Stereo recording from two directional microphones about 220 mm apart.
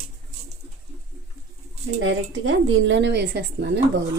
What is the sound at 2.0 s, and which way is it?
Speech, 60° right (ahead or behind).